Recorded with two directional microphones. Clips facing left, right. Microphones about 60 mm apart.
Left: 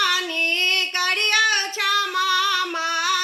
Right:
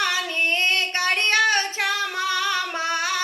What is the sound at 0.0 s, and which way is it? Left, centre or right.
Child singing, right.